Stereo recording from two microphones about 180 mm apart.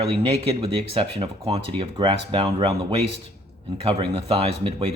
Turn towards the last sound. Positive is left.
turn(degrees=-30)  # may be behind; listen again after turning